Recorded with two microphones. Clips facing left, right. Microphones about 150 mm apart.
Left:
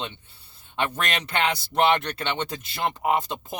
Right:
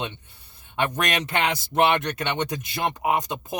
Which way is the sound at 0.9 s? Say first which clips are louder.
Right 2 dB; 15° right (ahead or behind).